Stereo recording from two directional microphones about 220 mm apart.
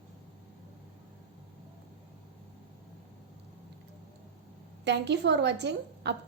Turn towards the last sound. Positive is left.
turn(degrees=-50)  # may be behind; listen again after turning